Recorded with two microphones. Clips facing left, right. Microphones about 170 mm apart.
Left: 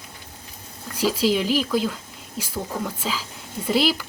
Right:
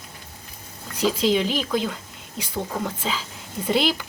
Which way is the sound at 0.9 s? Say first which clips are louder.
Even; 5° left (ahead or behind).